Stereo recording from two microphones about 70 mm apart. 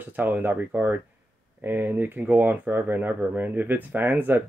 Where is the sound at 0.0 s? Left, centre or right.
Right.